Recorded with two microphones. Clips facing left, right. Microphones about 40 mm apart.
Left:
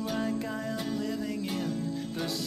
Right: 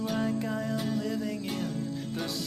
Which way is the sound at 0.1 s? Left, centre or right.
Centre.